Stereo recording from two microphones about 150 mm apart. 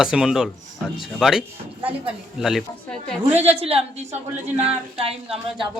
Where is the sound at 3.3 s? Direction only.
40° right (ahead or behind).